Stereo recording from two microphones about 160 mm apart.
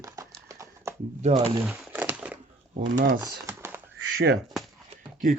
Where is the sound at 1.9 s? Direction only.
10° right (ahead or behind).